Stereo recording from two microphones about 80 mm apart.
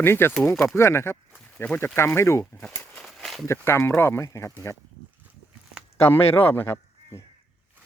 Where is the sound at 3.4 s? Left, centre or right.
Left.